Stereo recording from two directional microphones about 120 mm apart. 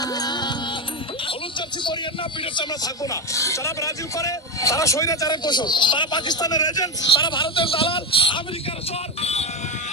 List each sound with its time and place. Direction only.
0.0 s music: 35° left (ahead or behind)
2.6 s speech: 30° left (ahead or behind); by 8.4 s 50° left (ahead or behind)
9.2 s music: 65° left (ahead or behind)